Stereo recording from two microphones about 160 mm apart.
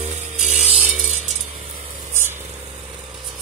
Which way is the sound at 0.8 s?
45° right (ahead or behind).